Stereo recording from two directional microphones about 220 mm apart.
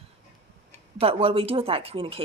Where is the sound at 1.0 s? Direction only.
25° right (ahead or behind).